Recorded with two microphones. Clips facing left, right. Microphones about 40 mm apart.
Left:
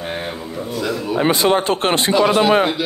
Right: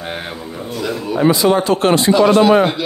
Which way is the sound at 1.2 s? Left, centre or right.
Left.